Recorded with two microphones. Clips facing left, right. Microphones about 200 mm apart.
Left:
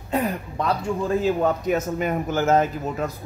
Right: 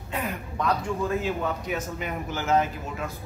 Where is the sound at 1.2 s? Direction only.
40° left (ahead or behind).